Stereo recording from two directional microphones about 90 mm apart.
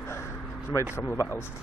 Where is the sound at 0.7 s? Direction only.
35° left (ahead or behind).